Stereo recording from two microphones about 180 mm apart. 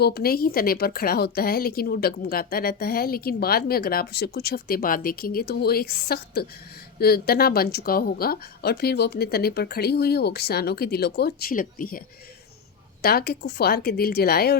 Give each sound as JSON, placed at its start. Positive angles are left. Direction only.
{"t": 0.0, "sound": "a woman's voice", "side_deg": 60}